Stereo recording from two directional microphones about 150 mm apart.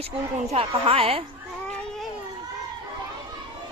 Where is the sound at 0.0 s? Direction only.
45° right (ahead or behind).